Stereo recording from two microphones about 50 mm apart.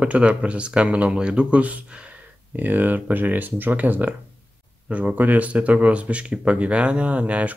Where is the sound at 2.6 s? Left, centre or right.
Right.